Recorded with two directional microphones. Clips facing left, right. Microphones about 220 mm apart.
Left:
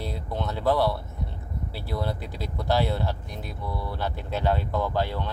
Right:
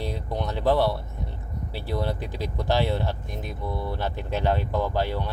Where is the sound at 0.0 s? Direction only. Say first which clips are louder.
Right 2 dB; 15° right (ahead or behind).